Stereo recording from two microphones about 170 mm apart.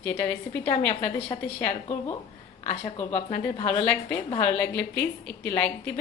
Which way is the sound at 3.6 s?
10° left (ahead or behind).